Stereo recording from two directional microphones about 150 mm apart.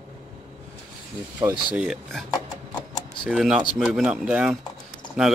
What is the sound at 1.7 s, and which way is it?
Speech, 5° right (ahead or behind).